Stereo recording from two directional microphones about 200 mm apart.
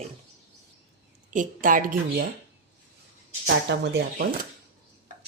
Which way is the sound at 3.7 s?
60° right (ahead or behind).